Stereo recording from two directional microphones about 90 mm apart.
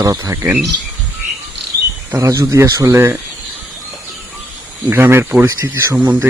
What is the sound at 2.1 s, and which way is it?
Speech, 35° right (ahead or behind).